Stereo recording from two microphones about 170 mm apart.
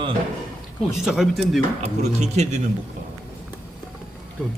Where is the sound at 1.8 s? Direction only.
40° right (ahead or behind).